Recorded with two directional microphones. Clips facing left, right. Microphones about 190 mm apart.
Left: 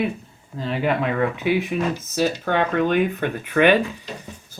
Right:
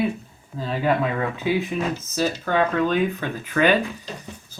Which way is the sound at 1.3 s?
20° left (ahead or behind).